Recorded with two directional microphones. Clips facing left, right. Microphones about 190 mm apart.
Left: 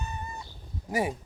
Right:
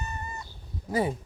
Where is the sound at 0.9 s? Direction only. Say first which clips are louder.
Right 2 dB; 15° left (ahead or behind).